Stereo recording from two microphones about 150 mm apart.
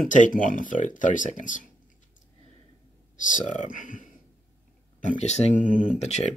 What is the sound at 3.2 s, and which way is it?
Speech, 55° left (ahead or behind).